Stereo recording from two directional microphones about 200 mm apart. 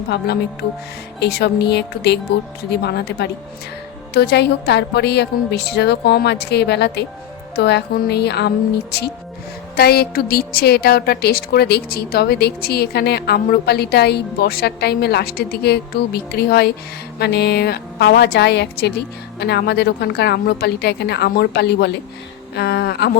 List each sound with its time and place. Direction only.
0.1 s a woman's voice: 55° left (ahead or behind)